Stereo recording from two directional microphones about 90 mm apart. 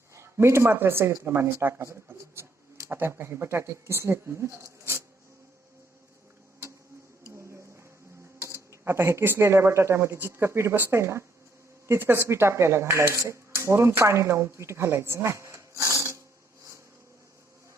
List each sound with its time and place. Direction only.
0.1 s speech: 30° right (ahead or behind)
7.3 s a sound: 30° right (ahead or behind)
8.4 s speech: 30° right (ahead or behind)